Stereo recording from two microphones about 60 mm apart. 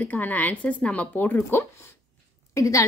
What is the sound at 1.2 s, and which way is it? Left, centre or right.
Speech, left.